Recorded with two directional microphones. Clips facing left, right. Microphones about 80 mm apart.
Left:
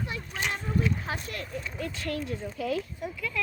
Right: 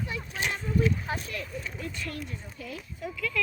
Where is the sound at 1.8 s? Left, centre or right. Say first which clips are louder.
Left 7 dB; left.